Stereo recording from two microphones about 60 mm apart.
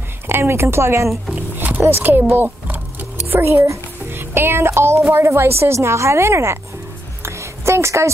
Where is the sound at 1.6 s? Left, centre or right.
Right.